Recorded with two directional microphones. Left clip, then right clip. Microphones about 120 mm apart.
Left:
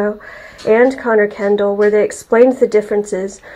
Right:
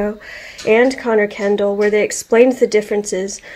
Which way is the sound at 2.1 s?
10° right (ahead or behind).